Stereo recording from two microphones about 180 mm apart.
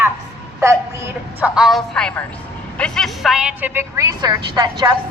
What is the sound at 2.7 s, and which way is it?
A woman's voice, 5° left (ahead or behind).